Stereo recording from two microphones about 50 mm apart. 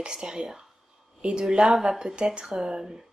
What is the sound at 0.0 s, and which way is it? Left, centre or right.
Speech, centre.